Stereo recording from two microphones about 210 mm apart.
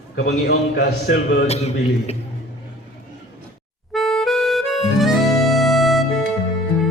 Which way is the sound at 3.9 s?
Centre (ahead or behind).